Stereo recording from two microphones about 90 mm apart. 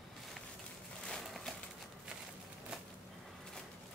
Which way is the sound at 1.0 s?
Centre (ahead or behind).